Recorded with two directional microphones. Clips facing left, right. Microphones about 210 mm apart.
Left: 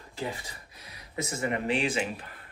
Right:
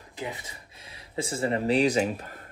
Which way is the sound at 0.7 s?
25° right (ahead or behind).